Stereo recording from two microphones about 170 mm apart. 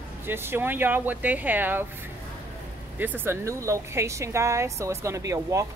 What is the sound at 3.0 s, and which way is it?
A woman's voice, 10° right (ahead or behind).